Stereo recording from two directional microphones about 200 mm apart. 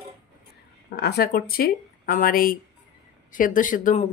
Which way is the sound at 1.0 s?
50° left (ahead or behind).